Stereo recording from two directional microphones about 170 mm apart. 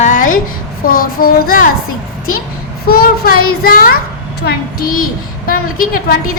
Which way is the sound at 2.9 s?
60° left (ahead or behind).